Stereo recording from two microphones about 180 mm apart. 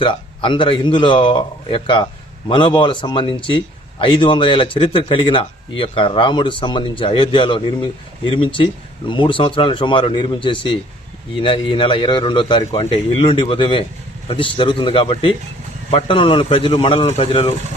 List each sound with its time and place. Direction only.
0.0 s a man's voice: 25° left (ahead or behind)